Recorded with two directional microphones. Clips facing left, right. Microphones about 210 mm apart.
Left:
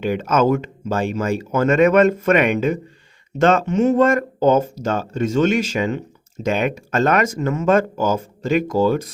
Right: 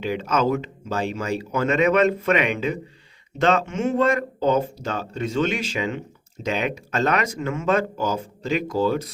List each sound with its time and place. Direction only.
0.0 s speech: 50° left (ahead or behind)